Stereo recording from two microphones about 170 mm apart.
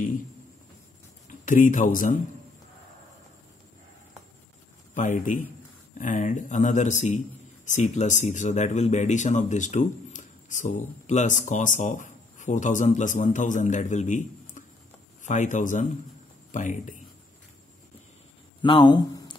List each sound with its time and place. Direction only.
1.4 s speech: 50° left (ahead or behind)
4.9 s speech: 50° left (ahead or behind)
18.6 s speech: 30° left (ahead or behind)